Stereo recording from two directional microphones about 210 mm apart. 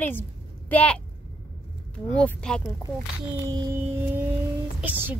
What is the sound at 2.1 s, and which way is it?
Speech, 5° left (ahead or behind).